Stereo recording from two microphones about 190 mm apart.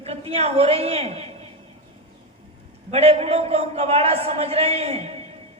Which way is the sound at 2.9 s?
35° right (ahead or behind).